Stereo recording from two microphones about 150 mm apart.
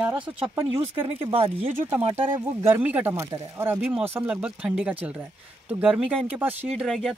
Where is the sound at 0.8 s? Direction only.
40° right (ahead or behind).